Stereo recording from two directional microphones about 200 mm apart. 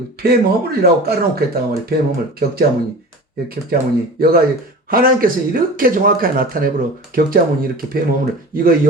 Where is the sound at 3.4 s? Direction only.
50° right (ahead or behind).